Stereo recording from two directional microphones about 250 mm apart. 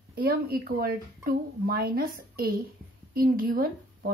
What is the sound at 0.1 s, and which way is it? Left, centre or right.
Speech, right.